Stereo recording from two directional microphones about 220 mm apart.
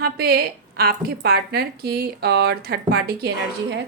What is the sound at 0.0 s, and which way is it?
A woman's voice, 45° right (ahead or behind).